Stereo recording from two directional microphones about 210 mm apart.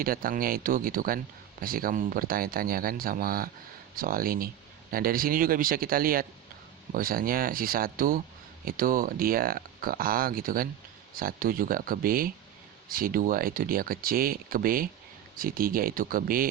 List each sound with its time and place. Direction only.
0.0 s speech: 45° right (ahead or behind)